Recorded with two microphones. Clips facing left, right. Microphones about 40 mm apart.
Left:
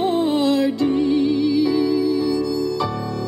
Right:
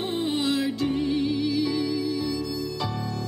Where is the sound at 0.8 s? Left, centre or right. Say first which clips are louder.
Left 7 dB; centre.